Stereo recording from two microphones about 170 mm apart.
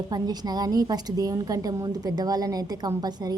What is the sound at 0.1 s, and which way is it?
A woman's voice, 25° right (ahead or behind).